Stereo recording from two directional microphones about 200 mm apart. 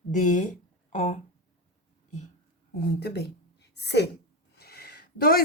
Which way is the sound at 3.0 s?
55° left (ahead or behind).